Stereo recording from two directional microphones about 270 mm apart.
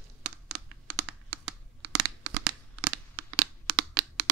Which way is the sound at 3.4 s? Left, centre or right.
Right.